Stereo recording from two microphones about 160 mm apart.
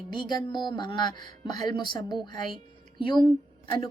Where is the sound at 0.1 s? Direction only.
25° left (ahead or behind).